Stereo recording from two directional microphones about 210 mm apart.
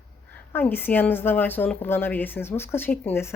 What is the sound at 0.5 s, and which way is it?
A woman's voice, 10° left (ahead or behind).